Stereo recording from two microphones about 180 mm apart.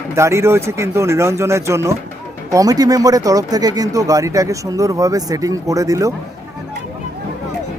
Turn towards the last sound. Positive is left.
turn(degrees=-20)  # may be behind; listen again after turning